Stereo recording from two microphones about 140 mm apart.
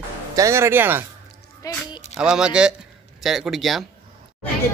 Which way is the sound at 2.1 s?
5° right (ahead or behind).